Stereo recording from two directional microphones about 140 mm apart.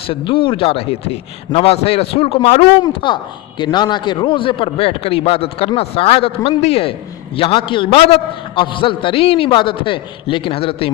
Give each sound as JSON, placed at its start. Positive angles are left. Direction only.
{"t": 0.1, "sound": "a man's voice", "side_deg": 35}
{"t": 2.8, "sound": "a man's voice", "side_deg": 35}